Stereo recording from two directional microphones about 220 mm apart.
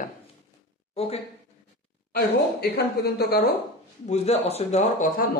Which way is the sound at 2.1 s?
45° left (ahead or behind).